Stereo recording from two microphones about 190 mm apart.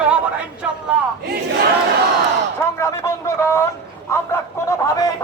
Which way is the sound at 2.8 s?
15° left (ahead or behind).